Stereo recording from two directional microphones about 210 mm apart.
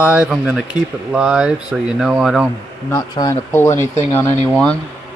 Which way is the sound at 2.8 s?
15° left (ahead or behind).